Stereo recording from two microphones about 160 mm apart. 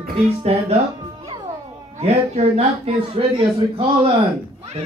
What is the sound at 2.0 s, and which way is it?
A man's voice, 40° right (ahead or behind).